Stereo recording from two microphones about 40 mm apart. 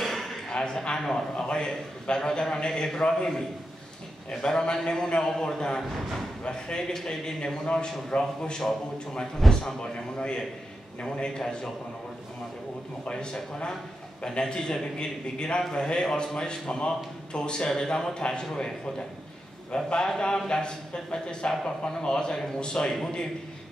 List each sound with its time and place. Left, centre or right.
0.0 s a sound: centre
0.5 s a man's voice: left
13.0 s a man's voice: left